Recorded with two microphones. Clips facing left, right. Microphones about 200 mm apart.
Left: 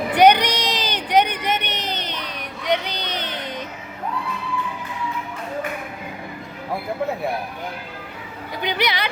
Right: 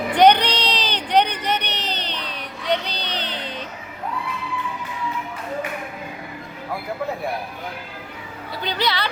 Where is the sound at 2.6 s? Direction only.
15° left (ahead or behind).